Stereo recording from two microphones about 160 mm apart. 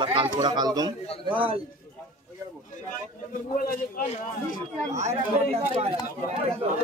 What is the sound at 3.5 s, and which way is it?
Speech, 60° left (ahead or behind).